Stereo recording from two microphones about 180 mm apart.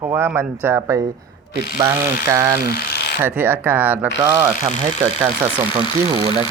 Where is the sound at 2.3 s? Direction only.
15° right (ahead or behind).